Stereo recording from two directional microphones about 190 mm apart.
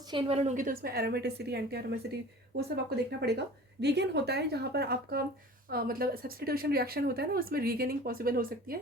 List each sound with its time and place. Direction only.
0.1 s speech: 30° right (ahead or behind); by 8.8 s 50° right (ahead or behind)